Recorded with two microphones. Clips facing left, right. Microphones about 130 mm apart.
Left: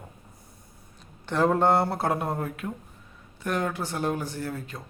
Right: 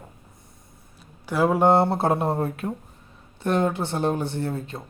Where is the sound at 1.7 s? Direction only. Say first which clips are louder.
Right 5 dB; 25° right (ahead or behind).